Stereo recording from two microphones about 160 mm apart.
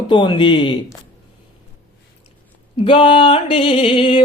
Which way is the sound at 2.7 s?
35° left (ahead or behind).